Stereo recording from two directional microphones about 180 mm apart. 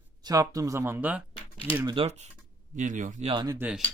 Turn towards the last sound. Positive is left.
turn(degrees=-5)  # may be behind; listen again after turning